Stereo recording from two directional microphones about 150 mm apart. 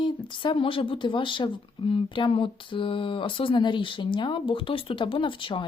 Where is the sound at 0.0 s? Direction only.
35° left (ahead or behind).